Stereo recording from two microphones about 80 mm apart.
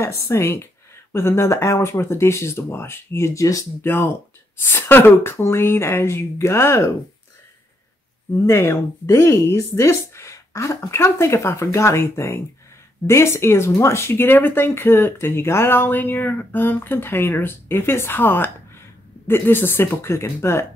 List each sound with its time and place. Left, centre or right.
0.0 s speech: left
3.8 s speech: left
8.4 s speech: left